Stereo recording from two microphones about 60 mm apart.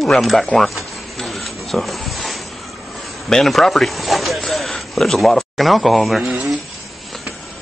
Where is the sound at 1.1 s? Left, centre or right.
Centre.